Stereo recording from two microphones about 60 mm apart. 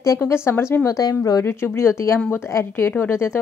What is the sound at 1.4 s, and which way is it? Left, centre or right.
Speech, left.